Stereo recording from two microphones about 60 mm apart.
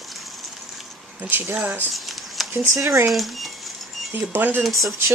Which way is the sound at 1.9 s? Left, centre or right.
Centre.